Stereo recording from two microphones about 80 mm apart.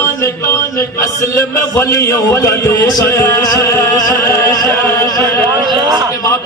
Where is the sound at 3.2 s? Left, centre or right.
Left.